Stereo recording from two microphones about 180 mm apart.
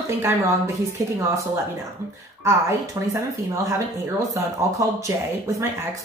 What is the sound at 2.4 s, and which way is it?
Speech, 15° right (ahead or behind).